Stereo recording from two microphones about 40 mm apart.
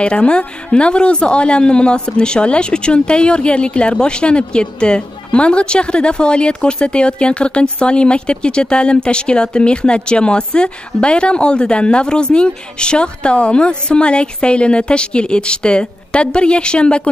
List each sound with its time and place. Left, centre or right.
0.0 s a woman's voice: left